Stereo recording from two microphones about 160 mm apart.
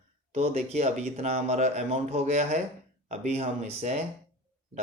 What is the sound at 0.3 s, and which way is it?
Speech, 40° right (ahead or behind).